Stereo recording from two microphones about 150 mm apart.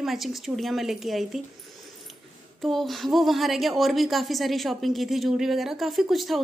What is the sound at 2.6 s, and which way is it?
Speech, centre (ahead or behind).